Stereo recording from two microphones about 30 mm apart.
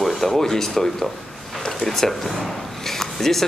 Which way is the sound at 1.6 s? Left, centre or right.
Centre.